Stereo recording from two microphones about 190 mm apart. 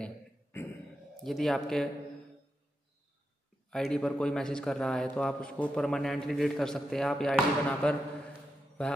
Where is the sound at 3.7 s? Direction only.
5° left (ahead or behind).